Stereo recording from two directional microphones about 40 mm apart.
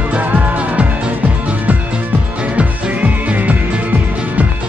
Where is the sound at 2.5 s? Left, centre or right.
Right.